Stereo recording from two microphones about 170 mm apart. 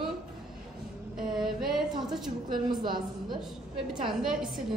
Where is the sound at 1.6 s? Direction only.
Centre (ahead or behind).